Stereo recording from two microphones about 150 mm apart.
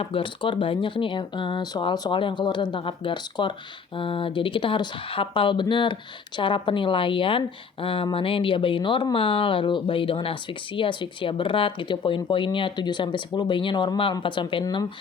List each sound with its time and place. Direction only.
0.0 s speech: 35° left (ahead or behind)